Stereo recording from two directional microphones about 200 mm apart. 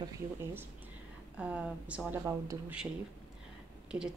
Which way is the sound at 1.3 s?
5° right (ahead or behind).